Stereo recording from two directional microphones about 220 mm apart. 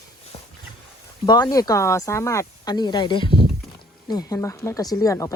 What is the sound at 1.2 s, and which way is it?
Speech, 20° left (ahead or behind).